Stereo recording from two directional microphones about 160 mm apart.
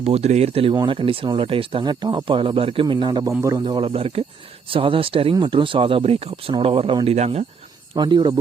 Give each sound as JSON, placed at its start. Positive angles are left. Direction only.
{"t": 0.0, "sound": "speech", "side_deg": -40}
{"t": 7.9, "sound": "speech", "side_deg": -25}